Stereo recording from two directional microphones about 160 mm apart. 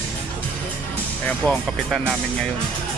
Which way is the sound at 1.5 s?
Centre (ahead or behind).